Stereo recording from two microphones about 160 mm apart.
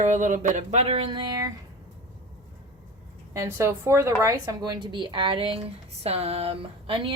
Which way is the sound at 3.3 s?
15° right (ahead or behind).